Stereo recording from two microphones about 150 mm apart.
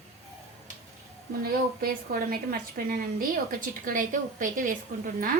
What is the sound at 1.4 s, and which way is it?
A woman's voice, 90° right.